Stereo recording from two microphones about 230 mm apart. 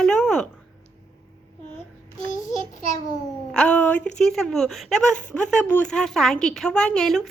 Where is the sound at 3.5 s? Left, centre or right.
Centre.